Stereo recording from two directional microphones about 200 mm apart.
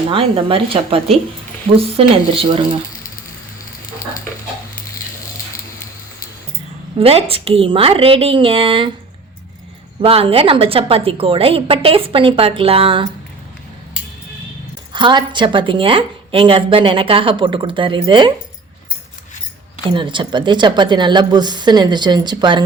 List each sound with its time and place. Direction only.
0.1 s a woman's voice: 25° right (ahead or behind)
7.0 s a woman's voice: 30° right (ahead or behind)
10.0 s a woman's voice: 30° right (ahead or behind)
14.9 s a woman's voice: 25° right (ahead or behind)
19.9 s a woman's voice: 25° right (ahead or behind)